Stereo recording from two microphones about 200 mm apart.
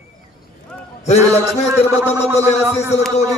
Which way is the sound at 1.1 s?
35° left (ahead or behind).